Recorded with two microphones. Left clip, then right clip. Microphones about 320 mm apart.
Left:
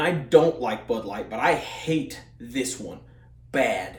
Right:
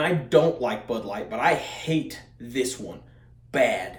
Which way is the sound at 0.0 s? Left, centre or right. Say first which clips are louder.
Left 2 dB; centre.